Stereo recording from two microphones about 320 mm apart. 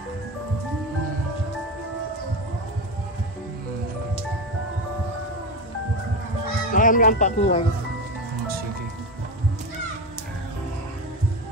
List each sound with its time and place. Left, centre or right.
6.7 s speech: left